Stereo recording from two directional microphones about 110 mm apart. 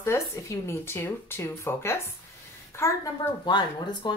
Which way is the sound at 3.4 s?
45° left (ahead or behind).